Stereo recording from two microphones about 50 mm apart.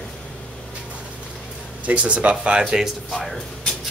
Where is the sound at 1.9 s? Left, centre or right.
Right.